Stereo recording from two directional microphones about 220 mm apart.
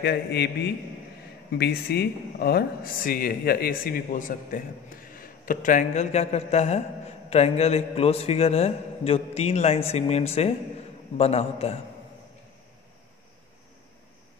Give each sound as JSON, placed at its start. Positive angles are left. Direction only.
{"t": 0.0, "sound": "a man's voice", "side_deg": 50}
{"t": 1.6, "sound": "speech", "side_deg": 45}